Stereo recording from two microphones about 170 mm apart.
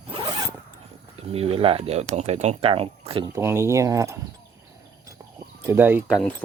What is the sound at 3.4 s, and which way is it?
Speech, 15° right (ahead or behind).